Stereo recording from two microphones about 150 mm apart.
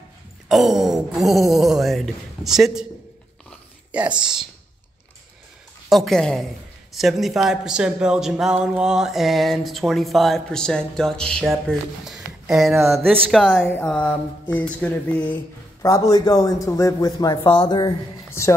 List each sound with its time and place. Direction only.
0.5 s speech: centre (ahead or behind)
3.9 s speech: 10° right (ahead or behind)
5.9 s speech: centre (ahead or behind)
12.0 s a sound: 5° right (ahead or behind)
13.3 s speech: 5° right (ahead or behind)
13.7 s a sound: 10° left (ahead or behind)
15.8 s a man's voice: 20° left (ahead or behind)